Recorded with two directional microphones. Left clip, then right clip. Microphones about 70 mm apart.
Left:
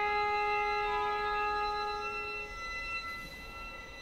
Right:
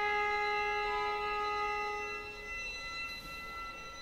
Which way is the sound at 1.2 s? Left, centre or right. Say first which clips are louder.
Left 2 dB; centre.